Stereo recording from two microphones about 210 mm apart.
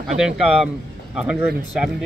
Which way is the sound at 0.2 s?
Centre (ahead or behind).